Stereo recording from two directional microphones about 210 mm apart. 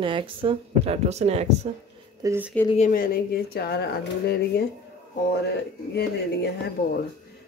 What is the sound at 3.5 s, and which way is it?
Speech, 50° left (ahead or behind).